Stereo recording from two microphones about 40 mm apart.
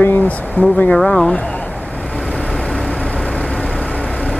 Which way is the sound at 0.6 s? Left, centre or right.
Left.